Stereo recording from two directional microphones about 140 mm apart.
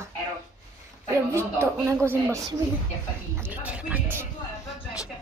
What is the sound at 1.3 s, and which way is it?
Speech, 20° right (ahead or behind).